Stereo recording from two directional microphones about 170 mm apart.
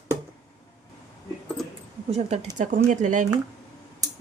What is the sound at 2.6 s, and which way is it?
Speech, 50° right (ahead or behind).